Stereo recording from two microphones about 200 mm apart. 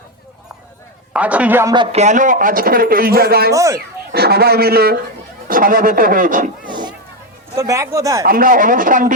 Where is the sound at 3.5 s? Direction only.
15° right (ahead or behind).